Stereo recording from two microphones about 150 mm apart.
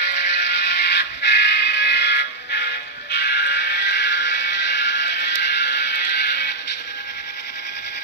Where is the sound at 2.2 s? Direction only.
90° left.